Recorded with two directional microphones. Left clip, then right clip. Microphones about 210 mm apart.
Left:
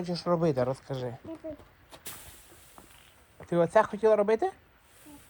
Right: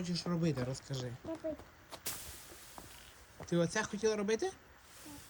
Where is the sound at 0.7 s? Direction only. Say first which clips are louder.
Left 8 dB; 15° left (ahead or behind).